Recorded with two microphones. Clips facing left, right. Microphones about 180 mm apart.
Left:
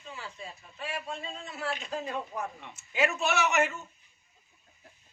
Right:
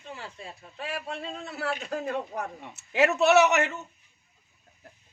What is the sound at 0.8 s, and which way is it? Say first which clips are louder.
A man's voice: right 3 dB; 65° right (ahead or behind).